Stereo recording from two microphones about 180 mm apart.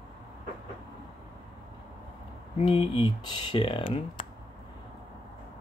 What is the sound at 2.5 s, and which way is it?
Speech, 35° left (ahead or behind).